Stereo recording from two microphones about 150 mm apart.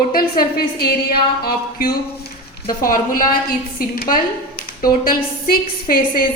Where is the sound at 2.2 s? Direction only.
80° left.